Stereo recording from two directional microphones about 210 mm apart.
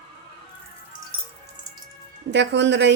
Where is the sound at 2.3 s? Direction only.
55° right (ahead or behind).